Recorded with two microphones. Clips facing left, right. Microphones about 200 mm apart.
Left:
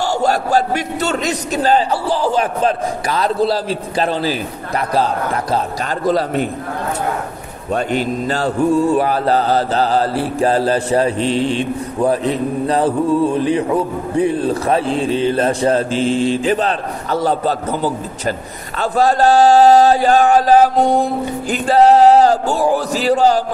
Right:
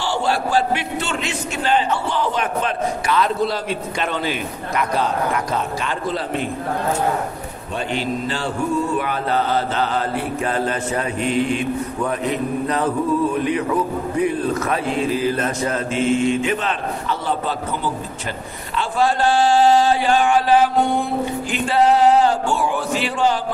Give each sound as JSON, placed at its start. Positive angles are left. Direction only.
{"t": 0.0, "sound": "mantra", "side_deg": 45}
{"t": 7.7, "sound": "mantra", "side_deg": 45}